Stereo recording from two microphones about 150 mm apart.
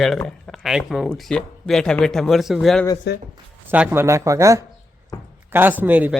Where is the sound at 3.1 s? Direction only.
90° left.